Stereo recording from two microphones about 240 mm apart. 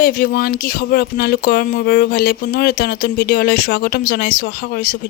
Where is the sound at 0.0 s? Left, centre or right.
Left.